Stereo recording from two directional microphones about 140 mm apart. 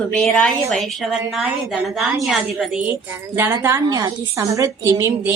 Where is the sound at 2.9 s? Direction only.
20° right (ahead or behind).